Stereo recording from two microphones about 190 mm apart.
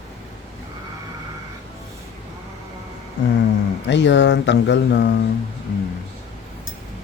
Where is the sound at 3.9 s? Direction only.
70° left (ahead or behind).